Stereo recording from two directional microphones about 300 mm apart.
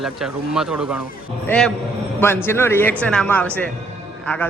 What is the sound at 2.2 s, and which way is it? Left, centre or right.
A man's voice, centre.